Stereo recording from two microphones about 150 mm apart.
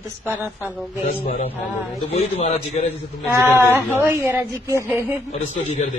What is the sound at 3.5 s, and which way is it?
A woman's voice, 15° right (ahead or behind).